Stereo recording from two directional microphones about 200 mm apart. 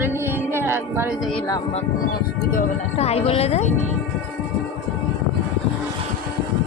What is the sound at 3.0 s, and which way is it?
Speech, 30° left (ahead or behind).